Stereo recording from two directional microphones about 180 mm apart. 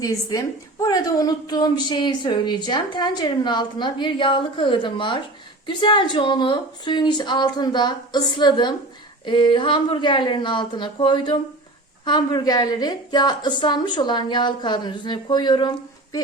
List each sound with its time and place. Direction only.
0.0 s a woman's voice: 20° left (ahead or behind)